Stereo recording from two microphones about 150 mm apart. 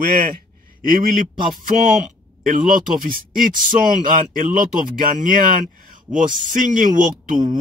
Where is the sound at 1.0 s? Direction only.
65° right (ahead or behind).